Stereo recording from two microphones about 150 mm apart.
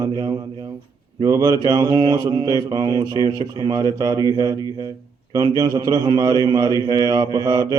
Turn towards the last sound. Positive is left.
turn(degrees=-25)  # may be behind; listen again after turning